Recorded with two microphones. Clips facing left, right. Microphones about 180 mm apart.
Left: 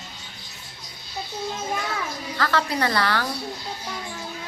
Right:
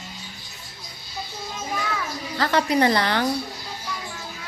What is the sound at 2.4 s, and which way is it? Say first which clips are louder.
Speech: right 4 dB; 20° right (ahead or behind).